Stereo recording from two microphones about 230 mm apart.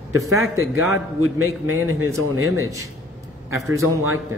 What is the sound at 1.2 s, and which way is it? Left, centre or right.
A man's voice, right.